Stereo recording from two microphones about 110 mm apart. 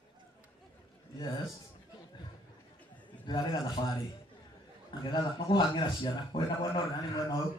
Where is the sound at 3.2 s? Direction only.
40° left (ahead or behind).